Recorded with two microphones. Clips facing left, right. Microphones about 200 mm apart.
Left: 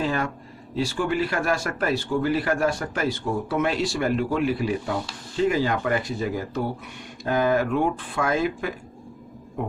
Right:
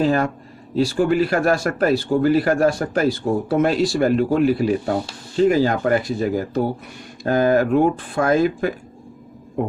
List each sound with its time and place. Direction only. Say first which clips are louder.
0.0 s a man's voice: right 7 dB; 40° right (ahead or behind)